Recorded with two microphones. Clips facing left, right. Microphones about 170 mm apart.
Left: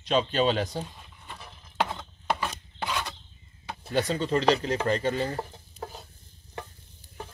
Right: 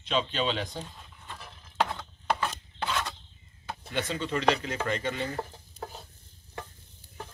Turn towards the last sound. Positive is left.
turn(degrees=10)  # may be behind; listen again after turning